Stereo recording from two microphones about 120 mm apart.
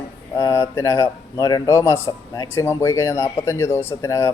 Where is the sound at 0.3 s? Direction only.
25° left (ahead or behind).